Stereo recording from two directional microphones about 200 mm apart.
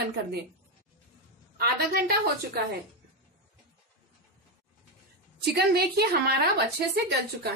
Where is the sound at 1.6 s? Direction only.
50° right (ahead or behind).